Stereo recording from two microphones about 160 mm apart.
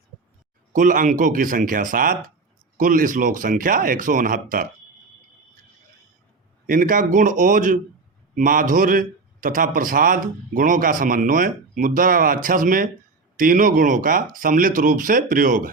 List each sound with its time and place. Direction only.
0.7 s a man's voice: 55° right (ahead or behind)
6.7 s a man's voice: 60° right (ahead or behind)